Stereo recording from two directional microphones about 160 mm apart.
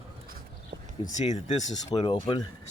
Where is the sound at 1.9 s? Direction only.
25° left (ahead or behind).